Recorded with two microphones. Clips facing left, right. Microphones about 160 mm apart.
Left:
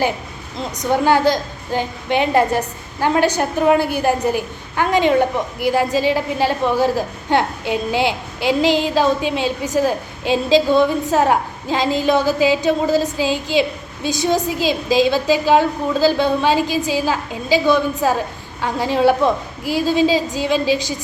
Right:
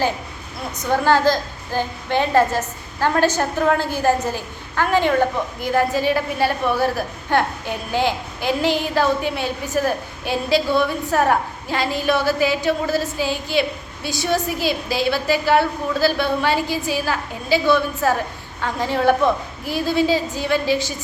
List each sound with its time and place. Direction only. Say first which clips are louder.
0.9 s a woman's voice: left 2 dB; 15° left (ahead or behind)